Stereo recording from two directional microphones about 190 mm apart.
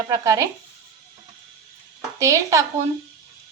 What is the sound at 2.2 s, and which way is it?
Speech, 15° right (ahead or behind).